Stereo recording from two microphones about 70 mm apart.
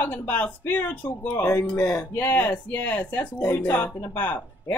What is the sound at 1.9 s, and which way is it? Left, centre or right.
Speech, left.